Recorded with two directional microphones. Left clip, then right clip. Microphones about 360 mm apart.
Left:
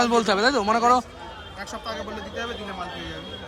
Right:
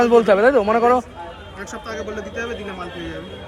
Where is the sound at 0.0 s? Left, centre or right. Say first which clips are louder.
Right 7 dB; centre.